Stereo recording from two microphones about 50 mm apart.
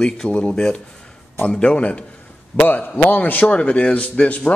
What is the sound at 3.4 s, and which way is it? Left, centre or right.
Speech, left.